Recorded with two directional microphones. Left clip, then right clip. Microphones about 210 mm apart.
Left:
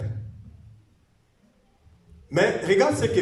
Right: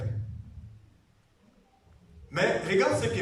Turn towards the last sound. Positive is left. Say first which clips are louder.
# left 5 dB
turn(degrees=35)  # may be behind; listen again after turning